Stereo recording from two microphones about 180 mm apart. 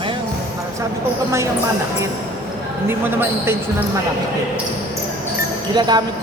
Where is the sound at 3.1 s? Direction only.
10° right (ahead or behind).